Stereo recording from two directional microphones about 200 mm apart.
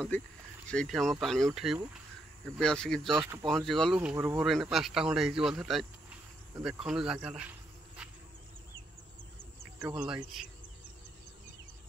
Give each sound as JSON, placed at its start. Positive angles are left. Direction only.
{"t": 0.1, "sound": "speech", "side_deg": 10}
{"t": 3.1, "sound": "speech", "side_deg": -15}
{"t": 3.4, "sound": "speech", "side_deg": 0}
{"t": 9.9, "sound": "speech", "side_deg": -5}